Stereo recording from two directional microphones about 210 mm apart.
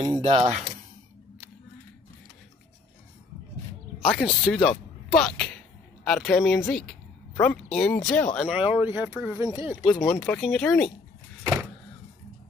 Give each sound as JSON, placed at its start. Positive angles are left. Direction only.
{"t": 0.0, "sound": "speech", "side_deg": -20}
{"t": 4.0, "sound": "speech", "side_deg": 0}
{"t": 8.5, "sound": "speech", "side_deg": -5}
{"t": 9.9, "sound": "speech", "side_deg": 10}